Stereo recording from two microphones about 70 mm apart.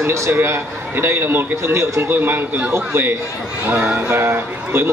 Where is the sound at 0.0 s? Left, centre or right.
Right.